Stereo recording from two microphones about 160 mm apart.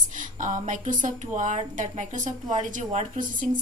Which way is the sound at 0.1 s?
55° right (ahead or behind).